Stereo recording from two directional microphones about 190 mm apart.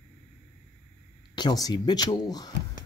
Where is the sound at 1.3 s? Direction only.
20° left (ahead or behind).